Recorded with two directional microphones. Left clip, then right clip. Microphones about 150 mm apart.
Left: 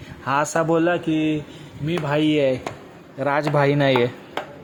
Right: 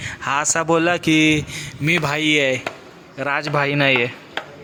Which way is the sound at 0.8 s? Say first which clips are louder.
Right 4 dB; 15° right (ahead or behind).